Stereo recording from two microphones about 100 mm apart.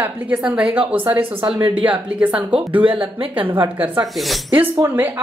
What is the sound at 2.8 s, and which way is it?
Speech, 60° right (ahead or behind).